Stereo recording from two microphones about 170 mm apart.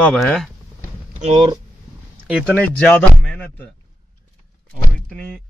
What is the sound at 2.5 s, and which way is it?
Speech, 10° left (ahead or behind).